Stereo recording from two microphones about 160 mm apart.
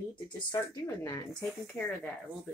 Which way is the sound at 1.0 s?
20° left (ahead or behind).